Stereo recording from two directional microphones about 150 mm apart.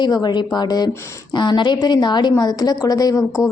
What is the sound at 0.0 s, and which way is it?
A woman's voice, 30° left (ahead or behind).